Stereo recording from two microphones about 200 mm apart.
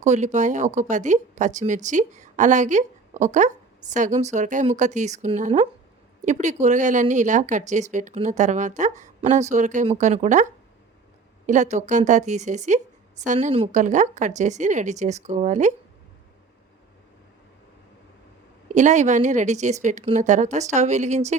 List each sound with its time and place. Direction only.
0.0 s speech: 35° right (ahead or behind)
18.7 s speech: 35° right (ahead or behind)